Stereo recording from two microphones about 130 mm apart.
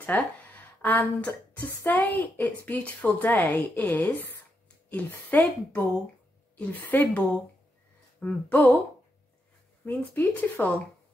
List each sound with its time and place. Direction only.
0.0 s speech: 15° left (ahead or behind)
9.8 s speech: 15° left (ahead or behind)